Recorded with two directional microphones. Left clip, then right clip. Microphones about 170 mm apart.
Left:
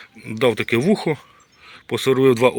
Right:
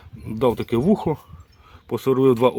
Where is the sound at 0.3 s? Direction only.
15° right (ahead or behind).